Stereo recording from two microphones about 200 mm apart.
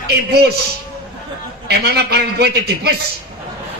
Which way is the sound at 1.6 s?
55° right (ahead or behind).